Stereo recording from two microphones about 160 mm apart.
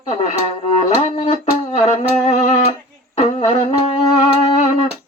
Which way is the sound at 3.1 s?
40° left (ahead or behind).